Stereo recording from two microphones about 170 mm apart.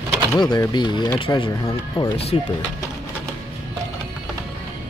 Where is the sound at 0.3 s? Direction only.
20° left (ahead or behind).